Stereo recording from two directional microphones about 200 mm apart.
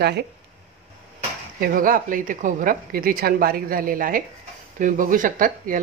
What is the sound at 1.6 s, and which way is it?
Speech, 45° right (ahead or behind).